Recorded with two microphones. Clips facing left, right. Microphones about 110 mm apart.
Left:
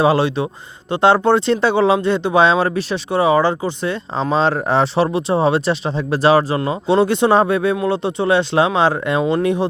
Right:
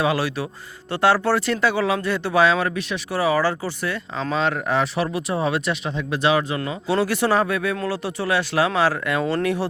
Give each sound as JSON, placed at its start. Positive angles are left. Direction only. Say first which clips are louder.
{"t": 0.0, "sound": "speech", "louder": "left 7 dB", "side_deg": 30}
{"t": 6.6, "sound": "speech", "louder": "left 7 dB", "side_deg": 25}